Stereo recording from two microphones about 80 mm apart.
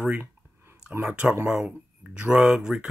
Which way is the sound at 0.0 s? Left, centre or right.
Centre.